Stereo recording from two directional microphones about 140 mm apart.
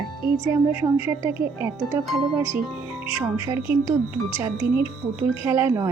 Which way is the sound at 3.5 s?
20° right (ahead or behind).